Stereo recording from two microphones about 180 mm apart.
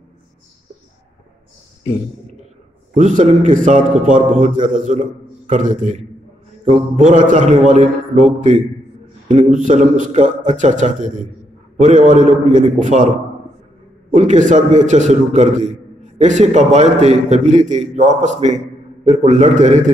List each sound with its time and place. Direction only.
2.9 s a man's voice: 45° right (ahead or behind)
9.3 s a man's voice: 40° right (ahead or behind)
14.1 s a man's voice: 40° right (ahead or behind)